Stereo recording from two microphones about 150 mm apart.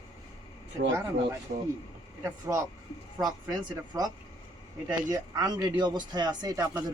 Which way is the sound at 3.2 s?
25° right (ahead or behind).